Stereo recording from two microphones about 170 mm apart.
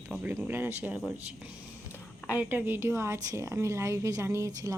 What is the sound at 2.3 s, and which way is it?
A woman's voice, 10° right (ahead or behind).